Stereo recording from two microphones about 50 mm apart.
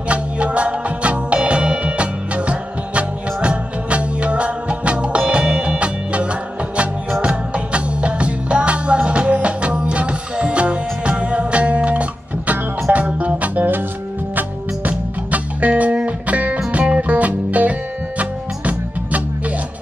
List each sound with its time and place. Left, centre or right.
0.1 s music: right
14.9 s music: right